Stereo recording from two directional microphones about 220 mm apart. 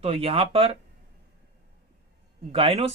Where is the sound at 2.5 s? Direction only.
25° right (ahead or behind).